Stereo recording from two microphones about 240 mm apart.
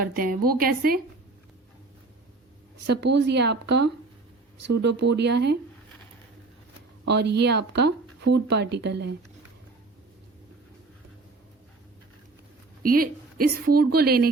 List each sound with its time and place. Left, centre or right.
0.0 s a woman's voice: right
2.7 s speech: right
7.1 s speech: right
12.8 s a woman's voice: right